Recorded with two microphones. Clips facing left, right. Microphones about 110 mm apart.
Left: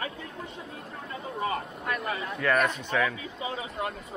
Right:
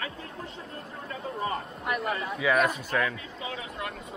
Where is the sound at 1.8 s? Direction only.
10° right (ahead or behind).